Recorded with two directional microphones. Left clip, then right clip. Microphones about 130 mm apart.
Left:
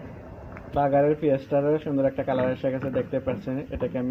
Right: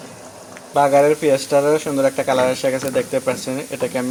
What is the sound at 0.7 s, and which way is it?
Speech, 30° right (ahead or behind).